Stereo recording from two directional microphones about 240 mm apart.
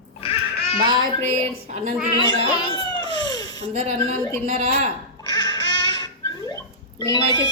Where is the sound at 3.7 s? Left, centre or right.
Right.